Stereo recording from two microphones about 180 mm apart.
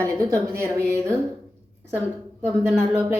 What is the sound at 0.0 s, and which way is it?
A woman's voice, 15° right (ahead or behind).